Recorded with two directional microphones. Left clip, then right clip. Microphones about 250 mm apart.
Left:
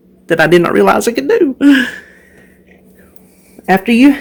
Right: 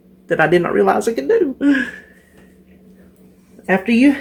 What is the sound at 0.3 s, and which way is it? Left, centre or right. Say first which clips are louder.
Speech: left 5 dB; left.